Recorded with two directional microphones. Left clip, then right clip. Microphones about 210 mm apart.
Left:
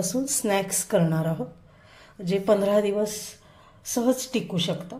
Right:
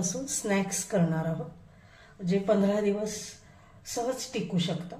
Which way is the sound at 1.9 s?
45° left (ahead or behind).